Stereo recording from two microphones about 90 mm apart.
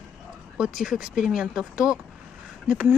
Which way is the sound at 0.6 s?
5° right (ahead or behind).